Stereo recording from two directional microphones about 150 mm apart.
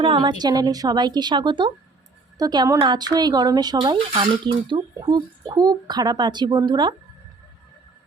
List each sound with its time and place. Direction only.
0.0 s speech: 30° right (ahead or behind)